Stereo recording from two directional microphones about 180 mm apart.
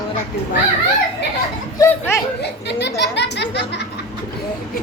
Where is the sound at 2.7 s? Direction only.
70° left (ahead or behind).